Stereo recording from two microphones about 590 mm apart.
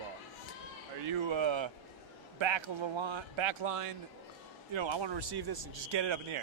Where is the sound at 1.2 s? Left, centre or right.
Right.